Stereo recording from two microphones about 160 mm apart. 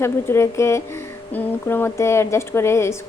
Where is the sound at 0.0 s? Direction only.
15° left (ahead or behind).